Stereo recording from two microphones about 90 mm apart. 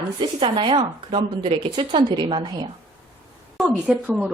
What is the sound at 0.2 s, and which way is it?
Speech, 75° right (ahead or behind).